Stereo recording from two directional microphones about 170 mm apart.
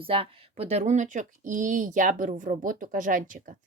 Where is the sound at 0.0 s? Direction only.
30° right (ahead or behind).